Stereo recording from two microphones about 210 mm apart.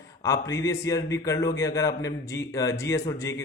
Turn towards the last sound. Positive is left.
turn(degrees=15)  # may be behind; listen again after turning